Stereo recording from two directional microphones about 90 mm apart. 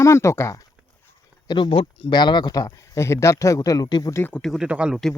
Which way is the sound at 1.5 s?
70° left (ahead or behind).